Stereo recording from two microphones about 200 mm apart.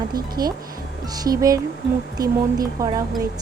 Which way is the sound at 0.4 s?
20° right (ahead or behind).